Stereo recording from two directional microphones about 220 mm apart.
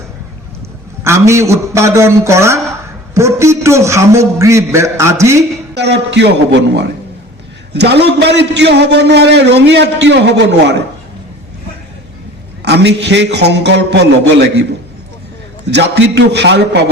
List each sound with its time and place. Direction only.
1.0 s a man's voice: 10° right (ahead or behind)
5.7 s a man's voice: 50° right (ahead or behind)
12.6 s a man's voice: 50° right (ahead or behind)
15.7 s a man's voice: 50° right (ahead or behind)